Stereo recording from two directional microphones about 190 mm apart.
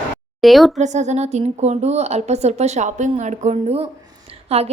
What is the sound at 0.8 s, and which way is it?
A woman's voice, 40° right (ahead or behind).